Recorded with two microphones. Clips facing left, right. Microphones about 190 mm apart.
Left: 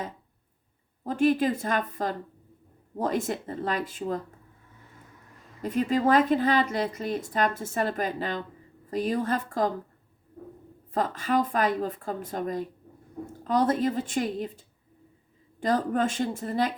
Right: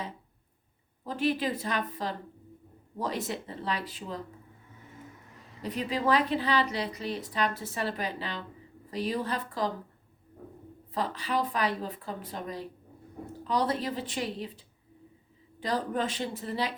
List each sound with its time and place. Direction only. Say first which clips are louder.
1.0 s a woman's voice: left 6 dB; 50° left (ahead or behind)
5.6 s a woman's voice: left 5 dB; 50° left (ahead or behind)
10.9 s a woman's voice: left 5 dB; 45° left (ahead or behind)
15.6 s a woman's voice: left 5 dB; 50° left (ahead or behind)